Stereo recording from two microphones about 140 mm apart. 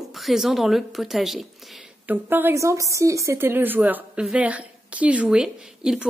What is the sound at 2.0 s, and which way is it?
A woman's voice, 15° right (ahead or behind).